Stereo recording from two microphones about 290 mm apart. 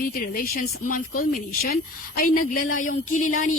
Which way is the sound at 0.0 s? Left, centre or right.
Left.